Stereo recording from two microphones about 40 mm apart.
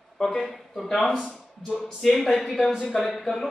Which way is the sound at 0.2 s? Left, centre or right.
Centre.